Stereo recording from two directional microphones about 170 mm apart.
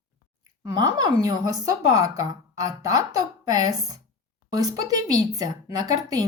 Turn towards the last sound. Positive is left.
turn(degrees=-20)  # may be behind; listen again after turning